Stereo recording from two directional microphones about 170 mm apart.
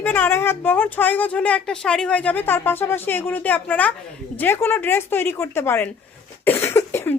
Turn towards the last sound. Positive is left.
turn(degrees=15)  # may be behind; listen again after turning